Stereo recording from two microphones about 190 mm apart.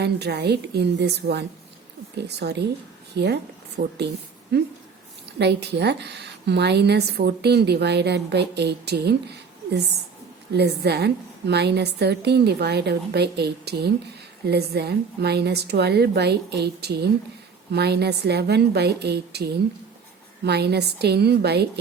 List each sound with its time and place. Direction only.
0.0 s a woman's voice: 60° right (ahead or behind)